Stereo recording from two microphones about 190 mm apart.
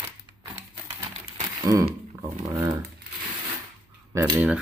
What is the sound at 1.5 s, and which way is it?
Speech, 15° right (ahead or behind).